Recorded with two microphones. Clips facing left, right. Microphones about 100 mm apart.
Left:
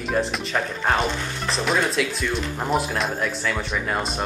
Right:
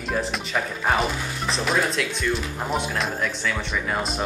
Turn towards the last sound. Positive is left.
turn(degrees=0)  # may be behind; listen again after turning